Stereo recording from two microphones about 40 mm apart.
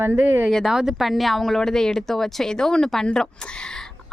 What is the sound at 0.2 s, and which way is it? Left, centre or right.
Speech, right.